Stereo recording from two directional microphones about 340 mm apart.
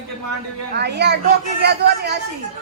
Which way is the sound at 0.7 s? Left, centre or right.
Right.